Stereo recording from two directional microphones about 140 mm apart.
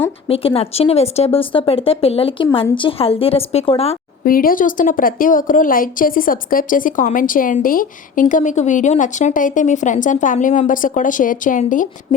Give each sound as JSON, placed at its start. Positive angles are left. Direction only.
{"t": 0.3, "sound": "speech", "side_deg": 45}
{"t": 4.2, "sound": "a woman's voice", "side_deg": 90}